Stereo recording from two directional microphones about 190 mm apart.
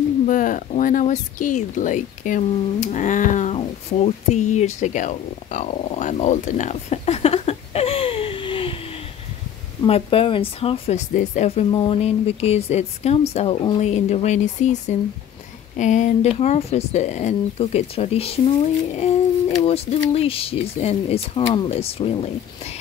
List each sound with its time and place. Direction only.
0.3 s speech: 45° left (ahead or behind)
19.6 s speech: 30° left (ahead or behind)